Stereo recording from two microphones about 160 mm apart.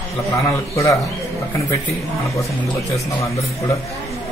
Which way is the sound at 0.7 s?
20° left (ahead or behind).